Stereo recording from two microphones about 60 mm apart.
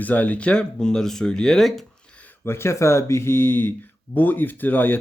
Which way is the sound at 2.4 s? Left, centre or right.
Left.